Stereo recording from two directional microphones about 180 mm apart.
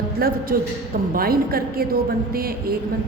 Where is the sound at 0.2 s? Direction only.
55° right (ahead or behind).